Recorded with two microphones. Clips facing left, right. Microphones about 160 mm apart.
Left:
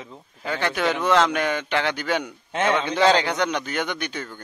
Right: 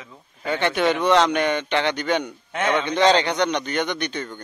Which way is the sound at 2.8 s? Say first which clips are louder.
Right 3 dB; 5° left (ahead or behind).